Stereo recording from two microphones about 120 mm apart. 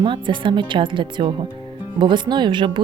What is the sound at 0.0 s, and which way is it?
Speech, 40° right (ahead or behind).